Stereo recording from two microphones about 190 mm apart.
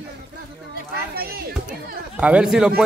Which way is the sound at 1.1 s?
50° right (ahead or behind).